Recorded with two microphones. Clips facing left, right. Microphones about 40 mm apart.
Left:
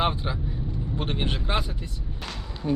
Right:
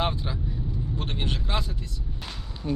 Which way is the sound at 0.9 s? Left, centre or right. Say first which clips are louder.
Left 5 dB; centre.